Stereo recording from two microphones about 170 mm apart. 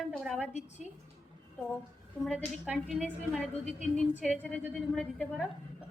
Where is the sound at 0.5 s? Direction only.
45° left (ahead or behind).